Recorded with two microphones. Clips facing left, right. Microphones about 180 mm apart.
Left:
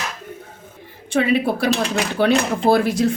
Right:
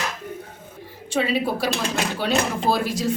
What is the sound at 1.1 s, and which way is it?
A woman's voice, 55° left (ahead or behind).